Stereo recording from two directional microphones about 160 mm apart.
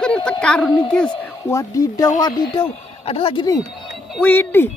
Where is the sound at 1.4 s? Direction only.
20° left (ahead or behind).